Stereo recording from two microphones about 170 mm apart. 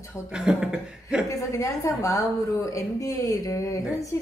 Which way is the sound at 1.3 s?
20° left (ahead or behind).